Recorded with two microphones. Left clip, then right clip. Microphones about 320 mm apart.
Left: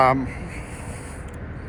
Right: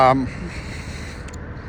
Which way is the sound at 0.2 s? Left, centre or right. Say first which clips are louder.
Right 3 dB; right.